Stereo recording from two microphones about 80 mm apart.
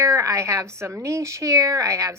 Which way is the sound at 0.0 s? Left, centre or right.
Right.